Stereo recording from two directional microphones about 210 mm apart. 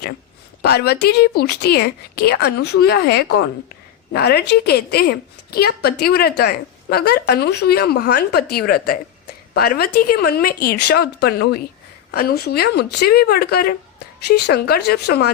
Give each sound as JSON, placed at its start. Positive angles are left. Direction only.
{"t": 0.6, "sound": "a woman's voice", "side_deg": 50}